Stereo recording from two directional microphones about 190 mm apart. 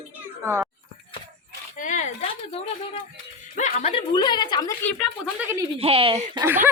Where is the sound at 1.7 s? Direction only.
40° left (ahead or behind); by 4.7 s 20° left (ahead or behind).